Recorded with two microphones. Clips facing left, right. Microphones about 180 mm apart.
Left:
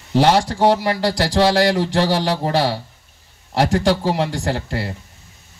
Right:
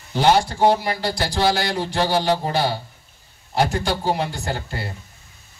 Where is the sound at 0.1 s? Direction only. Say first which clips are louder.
Left 2 dB; 75° left (ahead or behind).